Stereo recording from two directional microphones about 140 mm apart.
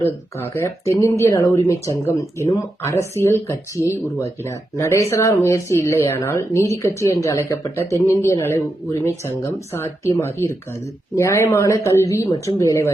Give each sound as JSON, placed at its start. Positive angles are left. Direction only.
{"t": 0.0, "sound": "speech", "side_deg": 20}